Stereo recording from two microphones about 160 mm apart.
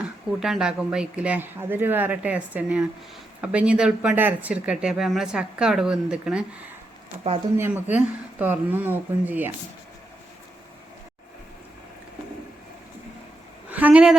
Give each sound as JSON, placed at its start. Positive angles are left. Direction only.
{"t": 0.3, "sound": "speech", "side_deg": 0}
{"t": 7.5, "sound": "speech", "side_deg": -10}
{"t": 13.7, "sound": "a woman's voice", "side_deg": -10}